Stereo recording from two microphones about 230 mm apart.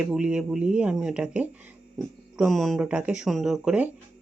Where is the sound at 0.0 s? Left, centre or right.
Centre.